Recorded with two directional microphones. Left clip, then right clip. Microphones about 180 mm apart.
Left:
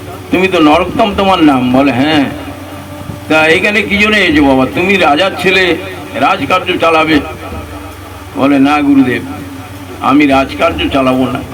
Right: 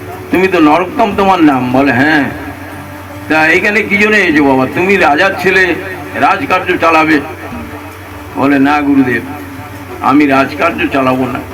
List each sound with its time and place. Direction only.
0.3 s a man's voice: 50° left (ahead or behind)
8.4 s a man's voice: 45° left (ahead or behind)